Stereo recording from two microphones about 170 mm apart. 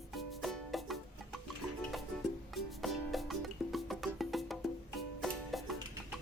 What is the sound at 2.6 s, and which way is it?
Music, centre (ahead or behind).